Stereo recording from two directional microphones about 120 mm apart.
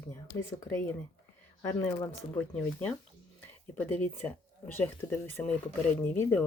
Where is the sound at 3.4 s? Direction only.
15° left (ahead or behind).